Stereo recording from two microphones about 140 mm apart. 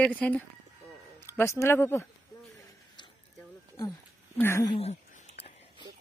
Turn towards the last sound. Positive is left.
turn(degrees=50)  # may be behind; listen again after turning